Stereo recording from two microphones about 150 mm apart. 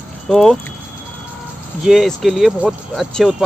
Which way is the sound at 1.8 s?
Centre (ahead or behind).